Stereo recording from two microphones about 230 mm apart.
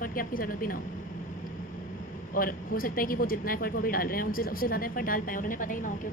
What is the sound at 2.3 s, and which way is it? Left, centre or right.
A woman's voice, left.